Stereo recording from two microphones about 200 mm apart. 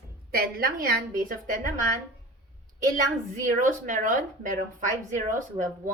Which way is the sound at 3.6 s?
40° right (ahead or behind).